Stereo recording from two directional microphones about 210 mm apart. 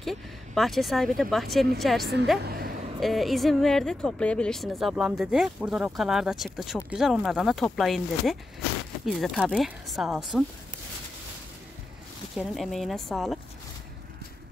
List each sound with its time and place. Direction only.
0.0 s speech: centre (ahead or behind)
2.4 s a sound: 45° right (ahead or behind)
3.0 s speech: centre (ahead or behind)
12.4 s speech: centre (ahead or behind)